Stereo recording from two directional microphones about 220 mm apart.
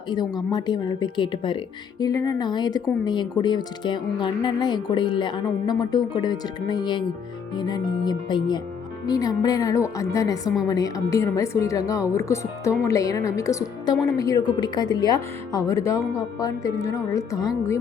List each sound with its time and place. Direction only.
0.5 s speech: 20° left (ahead or behind)